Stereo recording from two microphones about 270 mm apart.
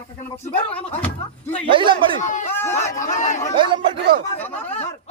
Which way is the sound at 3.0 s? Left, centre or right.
Left.